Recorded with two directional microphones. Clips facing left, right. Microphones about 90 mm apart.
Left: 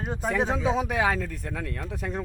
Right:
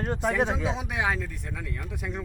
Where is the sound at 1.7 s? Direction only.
35° left (ahead or behind).